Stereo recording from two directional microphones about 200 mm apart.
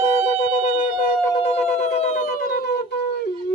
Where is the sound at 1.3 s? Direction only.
30° left (ahead or behind); by 3.0 s 55° left (ahead or behind).